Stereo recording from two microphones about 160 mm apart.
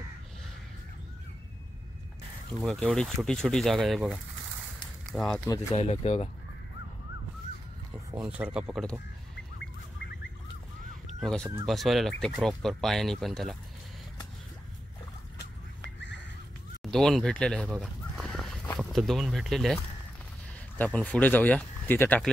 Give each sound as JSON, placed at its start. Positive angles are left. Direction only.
{"t": 2.6, "sound": "speech", "side_deg": 5}
{"t": 5.5, "sound": "speech", "side_deg": 15}
{"t": 5.8, "sound": "speech", "side_deg": 40}
{"t": 8.1, "sound": "speech", "side_deg": -10}
{"t": 9.6, "sound": "bird", "side_deg": 90}
{"t": 11.1, "sound": "speech", "side_deg": 0}
{"t": 16.8, "sound": "speech", "side_deg": 5}
{"t": 17.6, "sound": "fowl", "side_deg": 0}
{"t": 18.8, "sound": "speech", "side_deg": 0}